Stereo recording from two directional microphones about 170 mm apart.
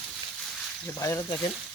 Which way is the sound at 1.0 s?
20° left (ahead or behind).